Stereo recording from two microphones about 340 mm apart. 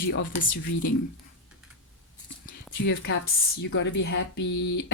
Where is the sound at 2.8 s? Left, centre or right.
Left.